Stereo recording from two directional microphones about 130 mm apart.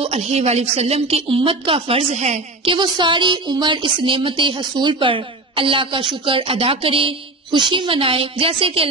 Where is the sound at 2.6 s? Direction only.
40° right (ahead or behind).